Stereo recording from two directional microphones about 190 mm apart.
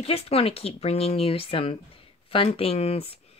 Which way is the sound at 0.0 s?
30° left (ahead or behind).